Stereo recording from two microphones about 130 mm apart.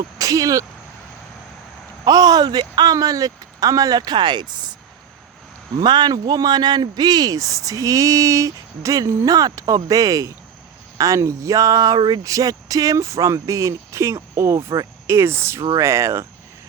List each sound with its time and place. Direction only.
0.2 s speech: 25° right (ahead or behind)
2.0 s speech: 30° right (ahead or behind)
5.8 s speech: 35° right (ahead or behind)